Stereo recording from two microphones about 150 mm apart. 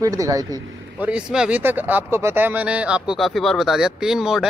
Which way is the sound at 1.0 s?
5° right (ahead or behind).